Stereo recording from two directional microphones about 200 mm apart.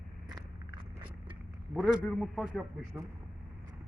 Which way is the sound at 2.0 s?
Centre (ahead or behind).